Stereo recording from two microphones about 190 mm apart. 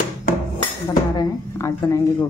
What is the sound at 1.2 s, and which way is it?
Speech, 15° left (ahead or behind).